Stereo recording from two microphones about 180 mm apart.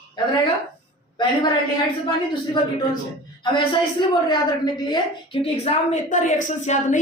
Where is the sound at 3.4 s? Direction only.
25° left (ahead or behind).